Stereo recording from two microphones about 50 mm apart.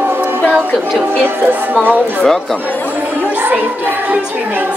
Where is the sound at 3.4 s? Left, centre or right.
Right.